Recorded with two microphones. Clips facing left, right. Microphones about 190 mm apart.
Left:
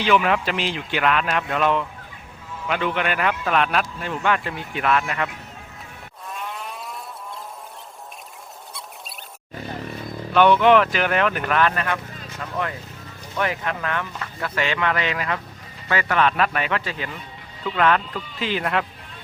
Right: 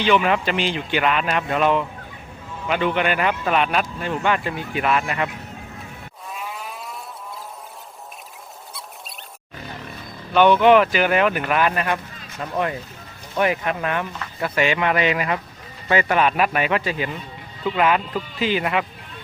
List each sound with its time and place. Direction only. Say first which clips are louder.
0.0 s speech: right 1 dB; centre (ahead or behind)
6.3 s a sound: even; 5° right (ahead or behind)
10.3 s speech: right 1 dB; centre (ahead or behind)